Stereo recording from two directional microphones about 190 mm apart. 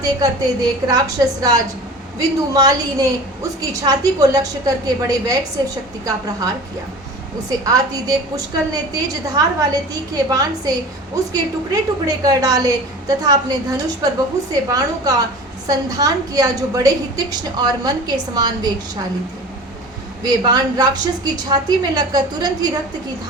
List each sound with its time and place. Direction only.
0.0 s a woman's voice: 20° right (ahead or behind)
7.6 s a woman's voice: 20° right (ahead or behind)
20.2 s a woman's voice: 20° right (ahead or behind)